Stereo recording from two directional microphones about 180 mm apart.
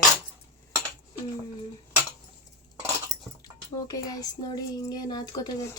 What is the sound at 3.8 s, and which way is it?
Speech, 20° left (ahead or behind).